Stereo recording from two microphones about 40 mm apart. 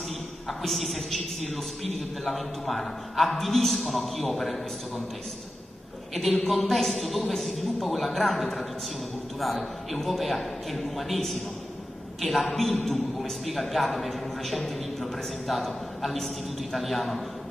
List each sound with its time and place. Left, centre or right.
0.5 s a man's voice: centre
6.1 s a man's voice: centre